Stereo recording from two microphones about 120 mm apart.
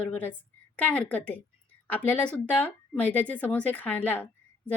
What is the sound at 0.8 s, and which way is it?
Speech, 10° left (ahead or behind).